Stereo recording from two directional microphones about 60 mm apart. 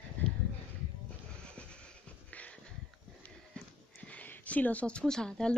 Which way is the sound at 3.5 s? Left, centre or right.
Left.